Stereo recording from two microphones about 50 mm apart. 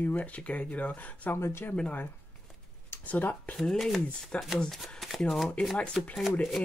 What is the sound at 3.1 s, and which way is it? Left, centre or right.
Speech, left.